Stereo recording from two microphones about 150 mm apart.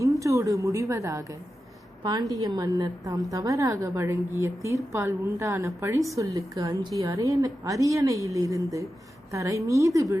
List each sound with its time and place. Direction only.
0.0 s a woman's voice: 20° right (ahead or behind)
2.3 s a woman's voice: 25° right (ahead or behind)